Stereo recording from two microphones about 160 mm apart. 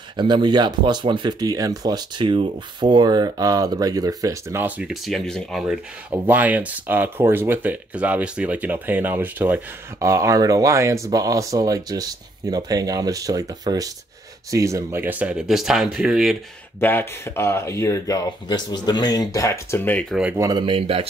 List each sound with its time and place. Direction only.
0.2 s speech: 30° right (ahead or behind); by 4.9 s 10° right (ahead or behind)
5.0 s speech: 5° left (ahead or behind)
16.8 s speech: 15° left (ahead or behind)
20.3 s speech: 25° right (ahead or behind)